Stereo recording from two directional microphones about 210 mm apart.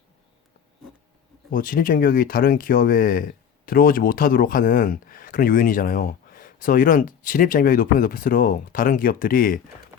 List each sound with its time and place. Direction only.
1.5 s speech: 40° left (ahead or behind)